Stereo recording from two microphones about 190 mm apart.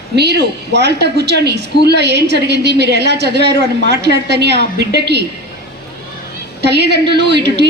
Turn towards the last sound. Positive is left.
turn(degrees=-65)  # may be behind; listen again after turning